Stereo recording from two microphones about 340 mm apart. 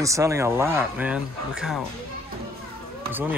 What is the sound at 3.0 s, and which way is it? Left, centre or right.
Run, centre.